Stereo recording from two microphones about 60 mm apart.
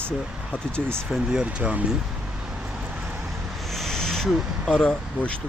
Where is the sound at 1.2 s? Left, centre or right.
Centre.